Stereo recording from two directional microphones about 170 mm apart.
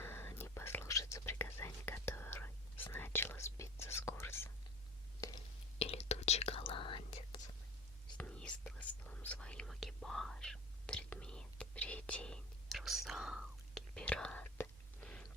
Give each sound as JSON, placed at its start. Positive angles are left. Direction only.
{"t": 0.0, "sound": "whispering", "side_deg": 15}
{"t": 5.8, "sound": "whispering", "side_deg": 40}
{"t": 8.2, "sound": "whispering", "side_deg": 5}